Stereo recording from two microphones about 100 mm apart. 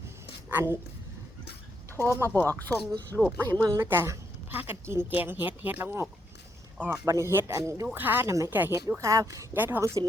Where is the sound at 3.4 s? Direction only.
40° right (ahead or behind).